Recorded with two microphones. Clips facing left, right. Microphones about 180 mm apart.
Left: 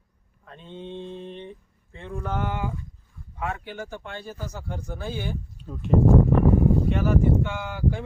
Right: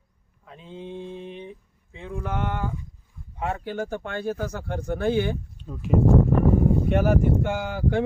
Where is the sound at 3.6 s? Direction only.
45° right (ahead or behind); by 5.4 s 65° right (ahead or behind).